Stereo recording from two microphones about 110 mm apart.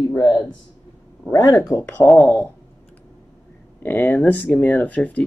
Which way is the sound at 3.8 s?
20° left (ahead or behind).